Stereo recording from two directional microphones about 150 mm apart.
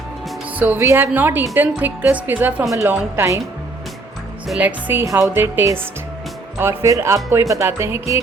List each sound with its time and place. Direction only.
0.5 s a woman's voice: 10° right (ahead or behind)
4.6 s a woman's voice: 15° right (ahead or behind)